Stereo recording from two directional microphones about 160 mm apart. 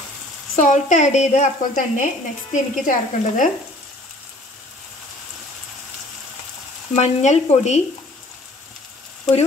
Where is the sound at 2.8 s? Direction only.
55° left (ahead or behind).